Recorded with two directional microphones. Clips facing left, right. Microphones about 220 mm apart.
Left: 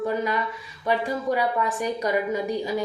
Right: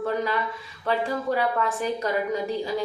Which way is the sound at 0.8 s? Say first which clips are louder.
Left 1 dB; 15° left (ahead or behind).